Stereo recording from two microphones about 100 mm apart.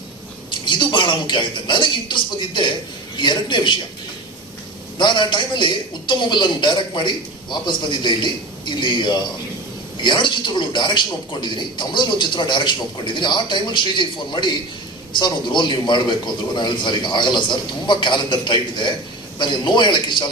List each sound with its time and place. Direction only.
0.5 s speech: 50° left (ahead or behind)
4.9 s speech: 50° left (ahead or behind)